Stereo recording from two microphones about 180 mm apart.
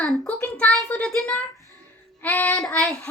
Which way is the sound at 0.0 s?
5° left (ahead or behind).